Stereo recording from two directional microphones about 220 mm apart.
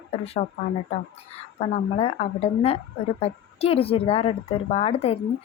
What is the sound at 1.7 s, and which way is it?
Speech, 25° left (ahead or behind).